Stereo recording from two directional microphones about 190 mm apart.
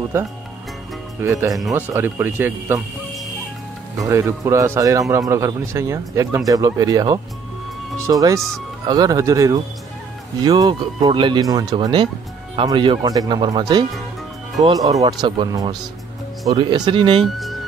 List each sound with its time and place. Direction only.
1.2 s speech: 15° right (ahead or behind)
4.1 s speech: 15° right (ahead or behind)
17.2 s speech: centre (ahead or behind)